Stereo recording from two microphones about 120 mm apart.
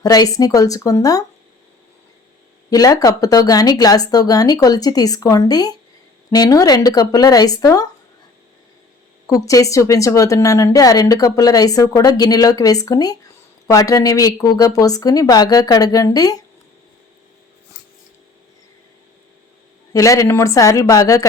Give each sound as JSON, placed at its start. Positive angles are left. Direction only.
{"t": 0.0, "sound": "a woman's voice", "side_deg": 30}
{"t": 2.6, "sound": "a woman's voice", "side_deg": 30}
{"t": 9.2, "sound": "a woman's voice", "side_deg": 30}
{"t": 19.9, "sound": "a woman's voice", "side_deg": 25}